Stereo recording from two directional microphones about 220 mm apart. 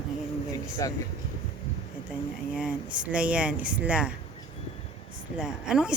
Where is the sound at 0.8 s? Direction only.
15° left (ahead or behind).